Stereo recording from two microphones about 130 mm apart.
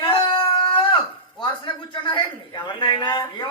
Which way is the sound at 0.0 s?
40° left (ahead or behind).